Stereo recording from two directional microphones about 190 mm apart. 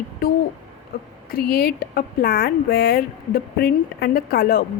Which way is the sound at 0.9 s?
55° left (ahead or behind).